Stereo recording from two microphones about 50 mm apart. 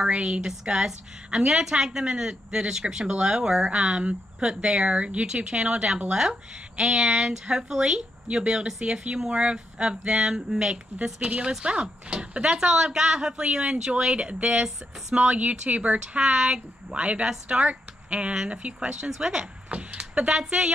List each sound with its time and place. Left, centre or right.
0.1 s a woman's voice: right
15.2 s a woman's voice: right